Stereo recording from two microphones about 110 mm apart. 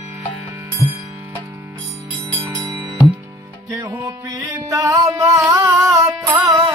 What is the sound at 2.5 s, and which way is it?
Music, 35° right (ahead or behind).